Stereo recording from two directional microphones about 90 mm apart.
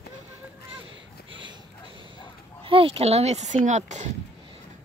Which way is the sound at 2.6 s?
85° right.